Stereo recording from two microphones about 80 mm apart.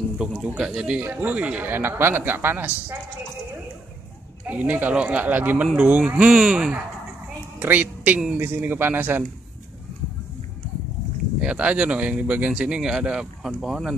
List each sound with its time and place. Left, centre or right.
0.4 s a man's voice: centre
4.5 s a man's voice: centre
7.5 s a woman's voice: right
11.4 s speech: centre